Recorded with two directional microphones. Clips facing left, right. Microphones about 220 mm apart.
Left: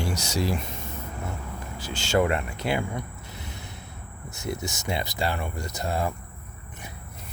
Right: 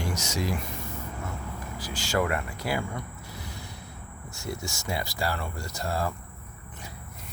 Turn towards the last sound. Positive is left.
turn(degrees=20)  # may be behind; listen again after turning